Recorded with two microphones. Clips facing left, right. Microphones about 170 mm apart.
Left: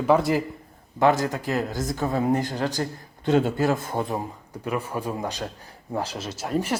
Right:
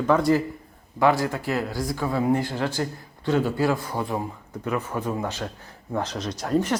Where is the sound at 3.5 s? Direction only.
45° left (ahead or behind).